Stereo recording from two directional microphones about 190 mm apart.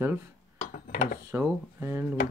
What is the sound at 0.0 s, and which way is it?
Speech, 10° right (ahead or behind).